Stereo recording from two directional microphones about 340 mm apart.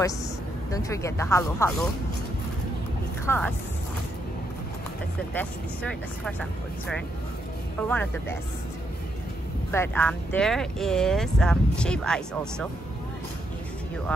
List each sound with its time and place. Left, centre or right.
0.7 s speech: centre
3.3 s speech: centre
5.3 s speech: centre
7.9 s speech: centre
9.7 s speech: centre